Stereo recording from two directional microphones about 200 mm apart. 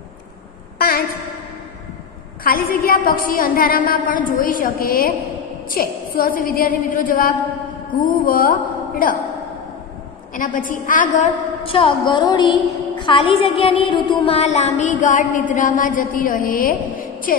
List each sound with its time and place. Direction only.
0.7 s a sound: 45° left (ahead or behind)
2.4 s a woman's voice: 45° left (ahead or behind)
10.3 s child singing: 40° left (ahead or behind)
11.6 s a woman's voice: 25° left (ahead or behind)
13.0 s child singing: 25° left (ahead or behind); by 16.7 s 45° left (ahead or behind)